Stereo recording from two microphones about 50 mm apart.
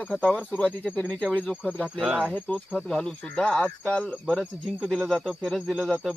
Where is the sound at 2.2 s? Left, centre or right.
Left.